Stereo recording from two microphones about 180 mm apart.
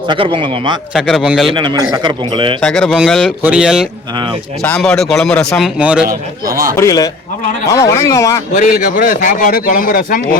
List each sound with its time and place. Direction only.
0.1 s a man's voice: 30° right (ahead or behind)
0.9 s a man's voice: centre (ahead or behind)
1.5 s a man's voice: 25° right (ahead or behind)
2.6 s a man's voice: 5° left (ahead or behind)
6.4 s a man's voice: 20° right (ahead or behind)
6.7 s a man's voice: 20° left (ahead or behind)
8.5 s speech: 45° left (ahead or behind)